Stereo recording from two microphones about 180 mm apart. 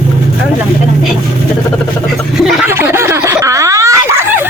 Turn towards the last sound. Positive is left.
turn(degrees=-15)  # may be behind; listen again after turning